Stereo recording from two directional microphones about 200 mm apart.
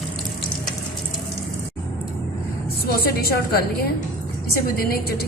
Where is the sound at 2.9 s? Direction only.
50° left (ahead or behind).